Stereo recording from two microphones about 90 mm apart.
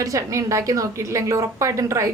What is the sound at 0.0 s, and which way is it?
A woman's voice, 35° right (ahead or behind).